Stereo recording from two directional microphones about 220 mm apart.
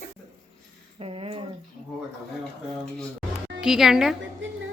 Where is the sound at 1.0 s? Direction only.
25° right (ahead or behind).